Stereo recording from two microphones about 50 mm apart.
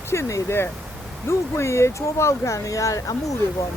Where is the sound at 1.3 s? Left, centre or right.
Left.